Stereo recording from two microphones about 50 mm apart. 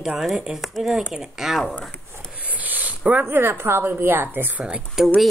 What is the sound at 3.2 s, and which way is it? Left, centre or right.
A woman's voice, right.